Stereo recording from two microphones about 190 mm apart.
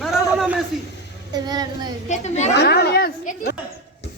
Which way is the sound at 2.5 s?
60° left (ahead or behind).